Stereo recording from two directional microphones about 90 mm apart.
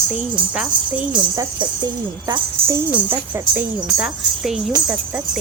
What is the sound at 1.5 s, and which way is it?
Speech, 50° right (ahead or behind).